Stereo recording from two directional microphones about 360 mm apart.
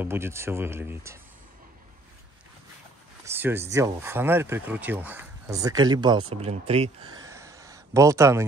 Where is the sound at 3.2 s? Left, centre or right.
Centre.